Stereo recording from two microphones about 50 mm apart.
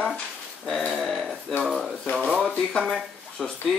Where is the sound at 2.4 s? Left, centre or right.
Centre.